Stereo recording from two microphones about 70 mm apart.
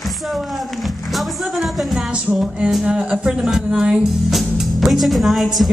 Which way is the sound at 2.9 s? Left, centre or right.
Centre.